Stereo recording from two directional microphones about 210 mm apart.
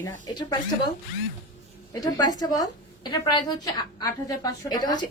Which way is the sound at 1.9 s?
20° left (ahead or behind).